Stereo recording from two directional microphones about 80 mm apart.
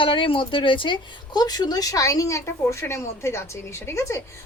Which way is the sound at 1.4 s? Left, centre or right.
Left.